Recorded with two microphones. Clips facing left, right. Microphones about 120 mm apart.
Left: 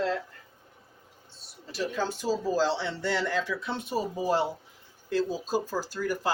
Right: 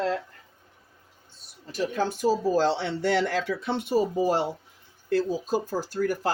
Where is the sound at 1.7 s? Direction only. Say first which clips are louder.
Right 3 dB; 50° right (ahead or behind); by 3.8 s 70° right (ahead or behind).